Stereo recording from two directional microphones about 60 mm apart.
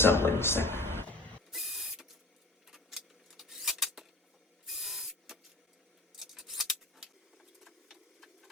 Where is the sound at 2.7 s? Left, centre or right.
Centre.